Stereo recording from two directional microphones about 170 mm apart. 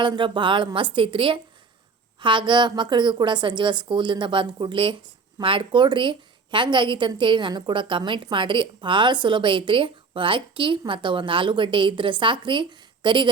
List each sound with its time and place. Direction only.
0.0 s a woman's voice: 30° right (ahead or behind)